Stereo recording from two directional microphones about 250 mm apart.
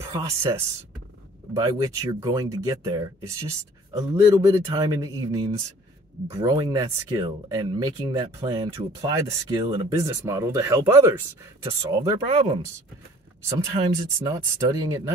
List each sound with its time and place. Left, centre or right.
0.1 s speech: centre